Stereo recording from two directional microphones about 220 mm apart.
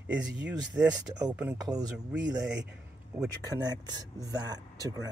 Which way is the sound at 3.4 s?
15° right (ahead or behind).